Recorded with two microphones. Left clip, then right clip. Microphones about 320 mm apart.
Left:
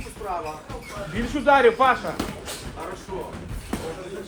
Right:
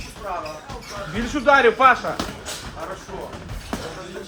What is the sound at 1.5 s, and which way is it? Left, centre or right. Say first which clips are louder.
Speech: right 3 dB; right.